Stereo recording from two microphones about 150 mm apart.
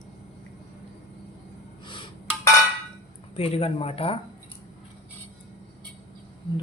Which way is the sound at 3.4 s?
40° left (ahead or behind).